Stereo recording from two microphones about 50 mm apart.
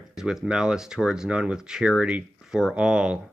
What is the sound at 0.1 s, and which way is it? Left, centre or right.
Speech, centre.